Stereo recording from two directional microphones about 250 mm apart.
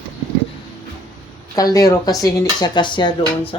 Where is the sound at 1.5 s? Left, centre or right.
Centre.